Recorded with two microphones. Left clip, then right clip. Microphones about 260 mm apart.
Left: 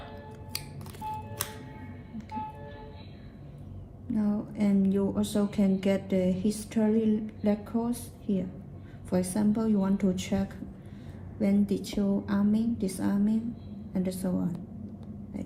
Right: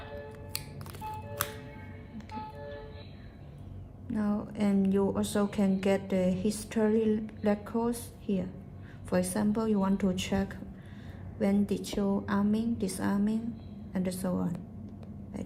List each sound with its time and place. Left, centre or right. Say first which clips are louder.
0.5 s music: left 4 dB; centre
4.1 s a woman's voice: left 2 dB; right